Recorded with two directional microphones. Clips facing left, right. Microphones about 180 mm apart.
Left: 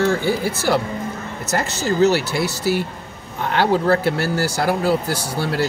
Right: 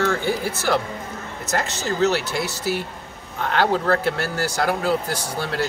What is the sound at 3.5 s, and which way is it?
Speech, 10° left (ahead or behind).